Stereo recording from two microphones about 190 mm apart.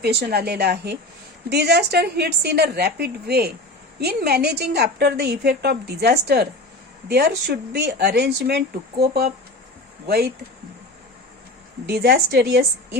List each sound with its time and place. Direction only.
0.0 s a woman's voice: 55° right (ahead or behind)
11.9 s a woman's voice: 55° right (ahead or behind)